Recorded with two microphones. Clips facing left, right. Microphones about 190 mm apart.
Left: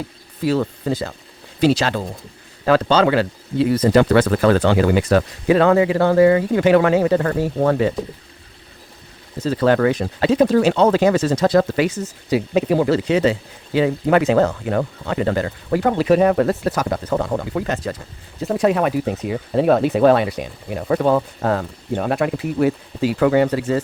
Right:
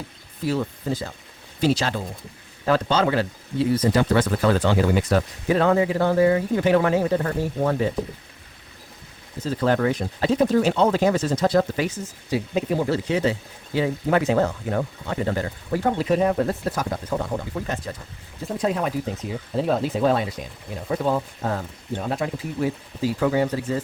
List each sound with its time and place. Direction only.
0.4 s speech: 80° left
9.4 s speech: 80° left